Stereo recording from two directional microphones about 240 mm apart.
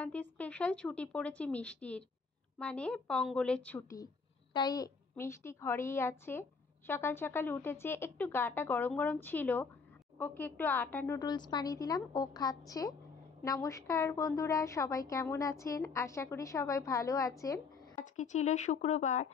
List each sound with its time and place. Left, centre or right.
0.0 s a woman's voice: centre
17.9 s speech: left